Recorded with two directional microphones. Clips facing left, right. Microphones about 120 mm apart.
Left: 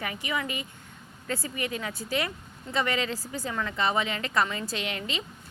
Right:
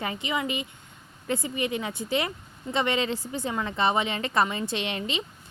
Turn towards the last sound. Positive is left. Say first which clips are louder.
# right 3 dB
turn(degrees=-25)  # may be behind; listen again after turning